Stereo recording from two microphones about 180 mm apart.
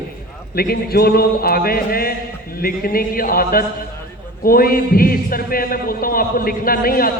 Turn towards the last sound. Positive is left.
turn(degrees=55)  # may be behind; listen again after turning